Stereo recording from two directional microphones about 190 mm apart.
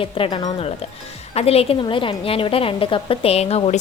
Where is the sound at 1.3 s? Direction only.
30° left (ahead or behind).